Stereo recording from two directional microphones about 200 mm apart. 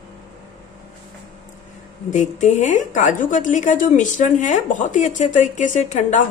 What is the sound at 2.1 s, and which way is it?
Speech, 40° left (ahead or behind).